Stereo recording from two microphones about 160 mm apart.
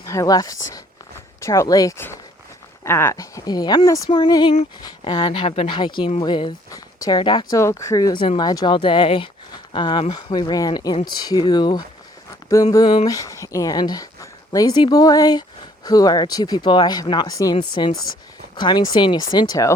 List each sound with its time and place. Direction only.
0.0 s speech: 20° left (ahead or behind)